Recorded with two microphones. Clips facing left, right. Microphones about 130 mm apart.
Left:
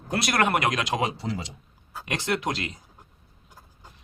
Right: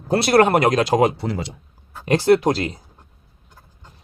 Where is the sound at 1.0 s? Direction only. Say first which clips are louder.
Right 9 dB; 60° right (ahead or behind).